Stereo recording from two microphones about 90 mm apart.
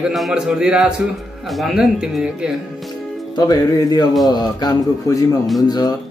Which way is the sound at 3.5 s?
45° left (ahead or behind).